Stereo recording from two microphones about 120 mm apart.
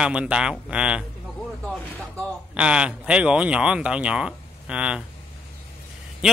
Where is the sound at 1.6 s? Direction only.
5° left (ahead or behind).